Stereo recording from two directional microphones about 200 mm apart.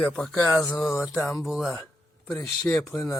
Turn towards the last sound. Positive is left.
turn(degrees=5)  # may be behind; listen again after turning